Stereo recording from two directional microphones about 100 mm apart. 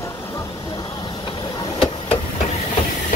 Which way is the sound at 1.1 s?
45° left (ahead or behind).